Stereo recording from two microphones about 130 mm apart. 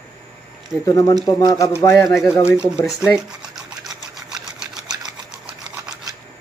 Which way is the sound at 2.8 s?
5° right (ahead or behind).